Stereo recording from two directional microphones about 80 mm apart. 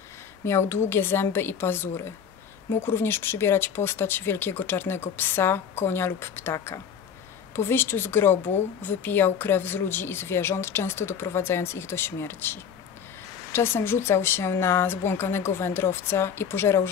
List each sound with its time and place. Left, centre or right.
0.5 s a woman's voice: left
6.5 s speech: left
7.5 s a woman's voice: left